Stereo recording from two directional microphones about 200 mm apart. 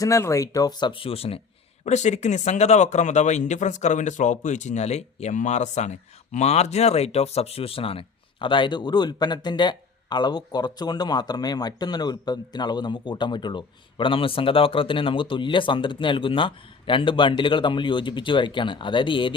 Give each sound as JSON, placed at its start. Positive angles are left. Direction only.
{"t": 0.0, "sound": "speech", "side_deg": 15}